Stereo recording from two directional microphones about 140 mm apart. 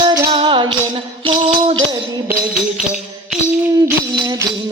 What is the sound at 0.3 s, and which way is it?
Music, 35° right (ahead or behind).